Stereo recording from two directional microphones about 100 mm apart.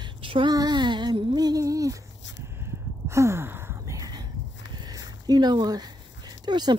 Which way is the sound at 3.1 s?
30° right (ahead or behind).